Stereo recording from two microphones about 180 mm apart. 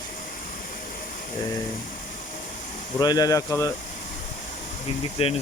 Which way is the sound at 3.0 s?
20° left (ahead or behind).